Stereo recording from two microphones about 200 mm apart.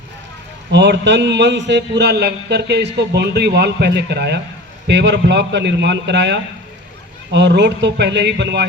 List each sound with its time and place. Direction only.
0.7 s a man's voice: 60° right (ahead or behind)